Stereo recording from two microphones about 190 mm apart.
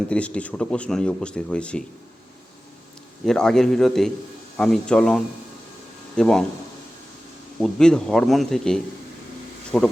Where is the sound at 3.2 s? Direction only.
5° left (ahead or behind).